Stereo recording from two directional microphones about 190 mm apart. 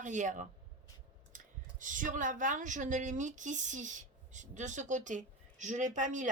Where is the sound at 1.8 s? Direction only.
45° right (ahead or behind).